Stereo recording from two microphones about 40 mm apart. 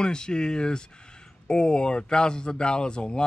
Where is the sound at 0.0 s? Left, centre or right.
Left.